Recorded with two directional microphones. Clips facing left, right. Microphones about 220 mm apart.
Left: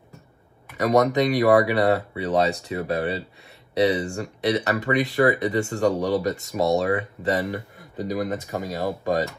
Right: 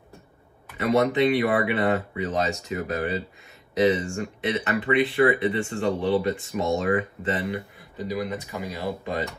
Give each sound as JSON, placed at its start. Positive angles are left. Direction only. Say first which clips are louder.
{"t": 0.7, "sound": "speech", "louder": "left 2 dB", "side_deg": 40}